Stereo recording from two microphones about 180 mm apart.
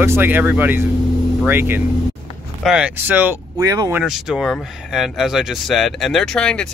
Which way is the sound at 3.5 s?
20° right (ahead or behind).